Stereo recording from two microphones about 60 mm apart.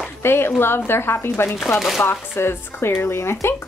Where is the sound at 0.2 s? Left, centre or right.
Left.